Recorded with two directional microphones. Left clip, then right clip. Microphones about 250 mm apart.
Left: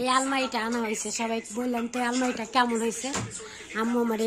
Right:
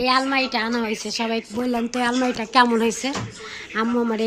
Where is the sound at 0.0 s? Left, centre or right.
Centre.